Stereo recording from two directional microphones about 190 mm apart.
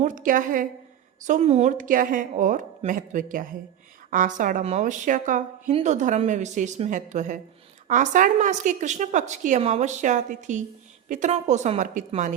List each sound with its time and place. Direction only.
0.0 s a woman's voice: 40° right (ahead or behind)